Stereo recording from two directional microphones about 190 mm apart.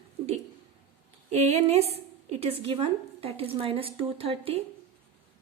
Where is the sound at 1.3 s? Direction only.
35° right (ahead or behind).